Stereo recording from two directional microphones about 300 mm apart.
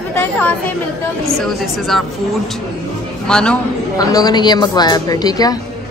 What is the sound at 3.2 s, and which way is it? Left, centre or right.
A woman's voice, centre.